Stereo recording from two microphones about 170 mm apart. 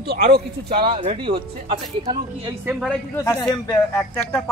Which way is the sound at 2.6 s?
5° right (ahead or behind).